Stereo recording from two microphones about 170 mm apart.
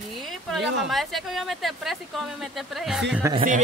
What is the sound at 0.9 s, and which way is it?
Speech, centre (ahead or behind).